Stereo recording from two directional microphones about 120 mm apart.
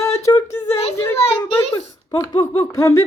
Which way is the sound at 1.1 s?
60° left (ahead or behind).